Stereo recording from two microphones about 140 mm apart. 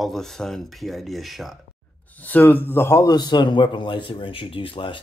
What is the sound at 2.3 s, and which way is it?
A man's voice, 10° left (ahead or behind).